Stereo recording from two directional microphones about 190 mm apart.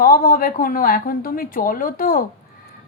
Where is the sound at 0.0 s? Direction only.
50° left (ahead or behind).